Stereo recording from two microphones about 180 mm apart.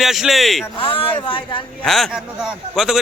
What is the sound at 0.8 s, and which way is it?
Speech, 30° left (ahead or behind).